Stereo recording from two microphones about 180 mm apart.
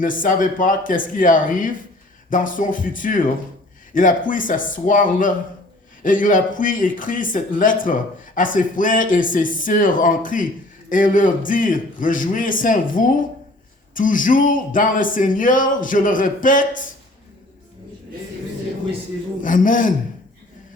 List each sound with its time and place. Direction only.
0.0 s speech: 50° left (ahead or behind)
19.4 s speech: 45° left (ahead or behind)